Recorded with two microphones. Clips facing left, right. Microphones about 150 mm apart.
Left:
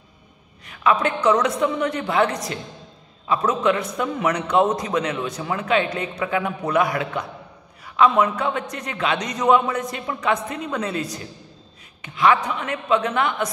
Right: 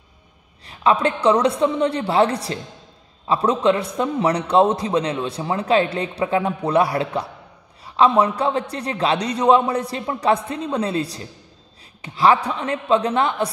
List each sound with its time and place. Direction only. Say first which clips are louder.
0.7 s a man's voice: right 2 dB; 30° right (ahead or behind)